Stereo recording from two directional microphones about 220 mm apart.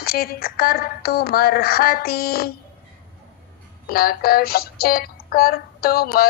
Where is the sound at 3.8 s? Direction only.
45° left (ahead or behind).